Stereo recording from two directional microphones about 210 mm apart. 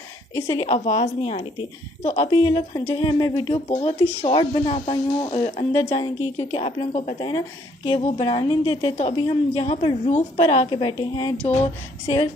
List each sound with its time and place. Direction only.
0.6 s a woman's voice: 30° left (ahead or behind)
7.2 s speech: 20° left (ahead or behind)